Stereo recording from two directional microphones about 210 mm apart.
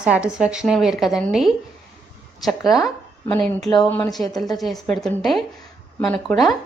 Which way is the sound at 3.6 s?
20° left (ahead or behind).